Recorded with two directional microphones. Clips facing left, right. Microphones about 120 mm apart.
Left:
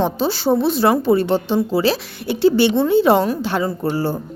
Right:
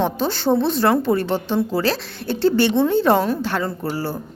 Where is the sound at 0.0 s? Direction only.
10° left (ahead or behind).